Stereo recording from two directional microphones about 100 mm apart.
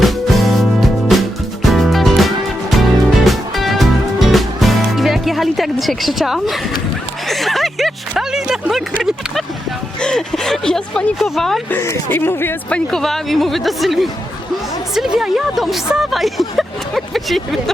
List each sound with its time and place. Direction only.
0.0 s music: centre (ahead or behind)
7.3 s a sound: centre (ahead or behind)
10.0 s speech: 5° left (ahead or behind)
11.7 s speech: 25° left (ahead or behind)
12.7 s speech: 5° left (ahead or behind)